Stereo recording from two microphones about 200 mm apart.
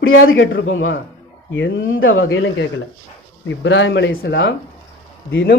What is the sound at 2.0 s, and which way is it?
A man's voice, 80° left.